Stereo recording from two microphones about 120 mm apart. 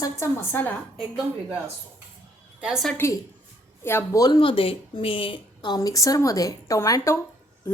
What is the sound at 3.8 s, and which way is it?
Speech, 20° left (ahead or behind).